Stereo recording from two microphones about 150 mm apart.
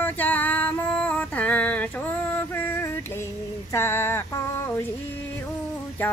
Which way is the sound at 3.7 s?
15° left (ahead or behind).